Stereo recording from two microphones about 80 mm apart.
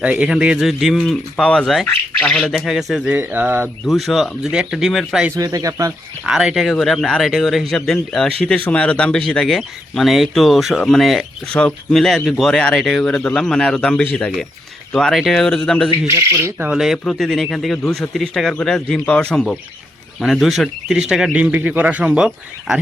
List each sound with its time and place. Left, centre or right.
0.0 s speech: centre
2.1 s speech: centre
2.6 s speech: centre
3.1 s speech: right
3.8 s speech: centre
4.9 s speech: centre
5.4 s speech: right
6.2 s speech: centre
9.6 s speech: centre
11.5 s speech: centre
16.1 s speech: right
16.6 s speech: centre
17.0 s speech: centre